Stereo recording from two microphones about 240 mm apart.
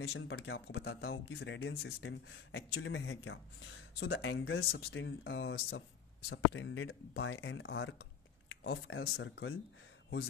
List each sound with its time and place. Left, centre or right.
0.0 s speech: left